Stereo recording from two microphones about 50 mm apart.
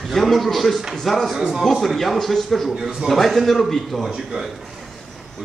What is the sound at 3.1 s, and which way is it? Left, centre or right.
A man's voice, centre.